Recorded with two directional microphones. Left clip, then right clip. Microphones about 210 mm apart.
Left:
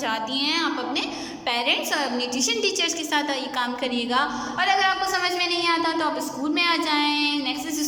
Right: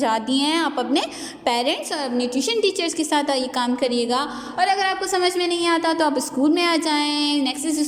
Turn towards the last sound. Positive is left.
turn(degrees=-25)  # may be behind; listen again after turning